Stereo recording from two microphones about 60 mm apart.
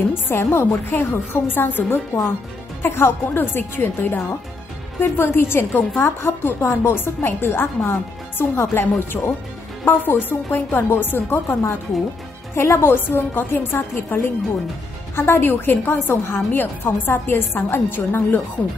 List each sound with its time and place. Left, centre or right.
0.1 s a woman's voice: left